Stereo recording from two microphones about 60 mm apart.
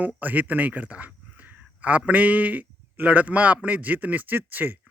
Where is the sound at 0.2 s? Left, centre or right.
Right.